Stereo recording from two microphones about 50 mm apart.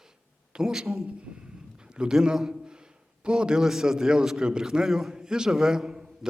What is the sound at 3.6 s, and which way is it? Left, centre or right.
A man's voice, centre.